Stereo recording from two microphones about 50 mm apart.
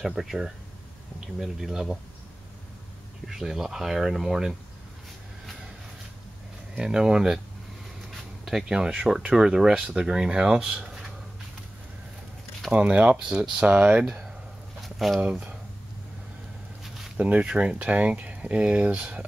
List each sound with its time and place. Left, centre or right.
0.0 s speech: centre
3.3 s speech: centre
6.8 s speech: centre
8.5 s speech: centre
12.7 s speech: right
14.8 s a sound: centre
15.1 s speech: right
17.2 s speech: right